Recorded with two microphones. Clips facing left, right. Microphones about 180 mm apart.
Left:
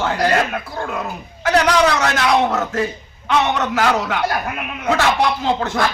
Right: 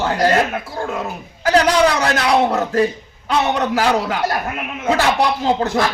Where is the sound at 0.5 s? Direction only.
20° right (ahead or behind).